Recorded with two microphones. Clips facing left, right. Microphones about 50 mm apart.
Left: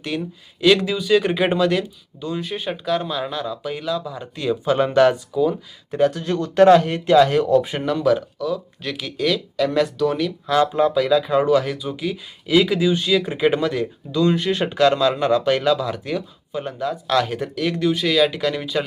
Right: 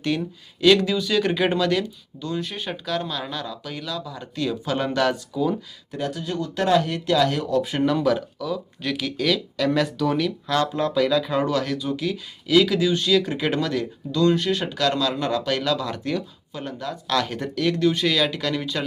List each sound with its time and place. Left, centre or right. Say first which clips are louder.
0.0 s speech: right 1 dB; centre
5.9 s speech: left 8 dB; left
8.0 s speech: left 3 dB; centre
10.6 s speech: left 7 dB; centre
10.9 s speech: left 3 dB; centre; by 15.7 s left
15.7 s speech: left 3 dB; centre